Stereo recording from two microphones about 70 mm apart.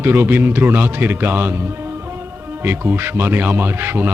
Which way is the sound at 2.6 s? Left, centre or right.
Right.